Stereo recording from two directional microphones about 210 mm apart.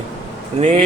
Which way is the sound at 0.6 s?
30° right (ahead or behind).